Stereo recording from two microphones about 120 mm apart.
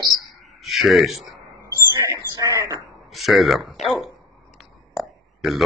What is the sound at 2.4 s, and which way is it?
Speech, 30° right (ahead or behind).